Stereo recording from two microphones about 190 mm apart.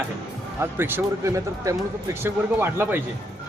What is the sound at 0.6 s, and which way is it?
Speech, 10° right (ahead or behind).